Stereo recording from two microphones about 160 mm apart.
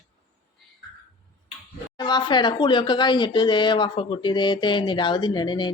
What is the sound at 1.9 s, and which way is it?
Speech, 25° left (ahead or behind).